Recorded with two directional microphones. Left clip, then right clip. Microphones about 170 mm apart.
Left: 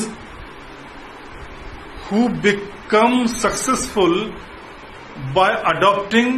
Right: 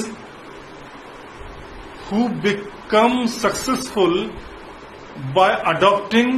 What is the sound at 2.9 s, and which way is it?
A man's voice, centre (ahead or behind).